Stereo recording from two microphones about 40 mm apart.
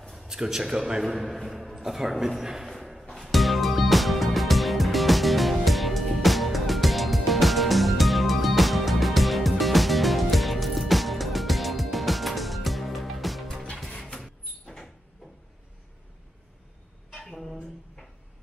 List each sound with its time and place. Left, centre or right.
0.3 s speech: centre
1.0 s a man's voice: centre
2.7 s music: centre
17.2 s a sound: centre